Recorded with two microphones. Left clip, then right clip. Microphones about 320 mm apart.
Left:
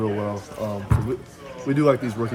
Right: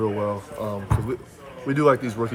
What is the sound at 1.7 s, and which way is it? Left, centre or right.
Speech, centre.